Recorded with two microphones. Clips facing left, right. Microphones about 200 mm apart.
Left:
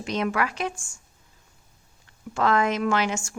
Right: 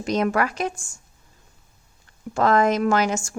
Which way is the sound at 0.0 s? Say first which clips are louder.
Right 4 dB; 40° right (ahead or behind).